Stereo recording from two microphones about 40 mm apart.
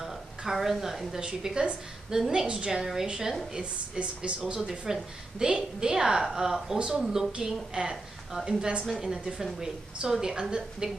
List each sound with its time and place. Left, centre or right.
0.4 s a woman's voice: centre
2.7 s a woman's voice: centre
4.0 s a woman's voice: right